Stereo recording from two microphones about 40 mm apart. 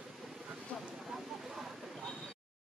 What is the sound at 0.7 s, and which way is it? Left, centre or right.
Vehicle, left.